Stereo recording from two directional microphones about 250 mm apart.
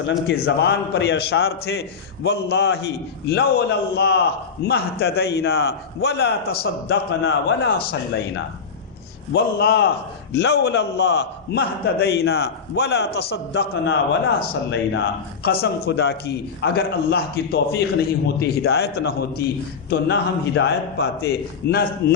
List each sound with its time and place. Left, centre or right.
0.3 s a man's voice: left